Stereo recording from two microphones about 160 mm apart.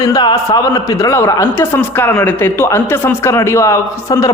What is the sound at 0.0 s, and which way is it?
A man's voice, 25° left (ahead or behind).